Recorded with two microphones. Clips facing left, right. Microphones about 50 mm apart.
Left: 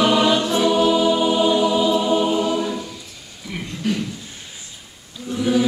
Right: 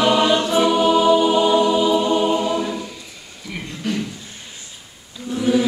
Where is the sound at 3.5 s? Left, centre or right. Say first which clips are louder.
Left 1 dB; centre.